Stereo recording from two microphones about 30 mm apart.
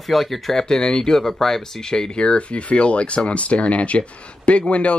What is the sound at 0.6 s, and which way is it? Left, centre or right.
Speech, left.